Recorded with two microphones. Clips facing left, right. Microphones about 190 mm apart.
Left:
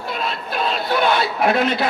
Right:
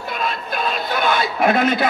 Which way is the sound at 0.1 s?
50° right (ahead or behind).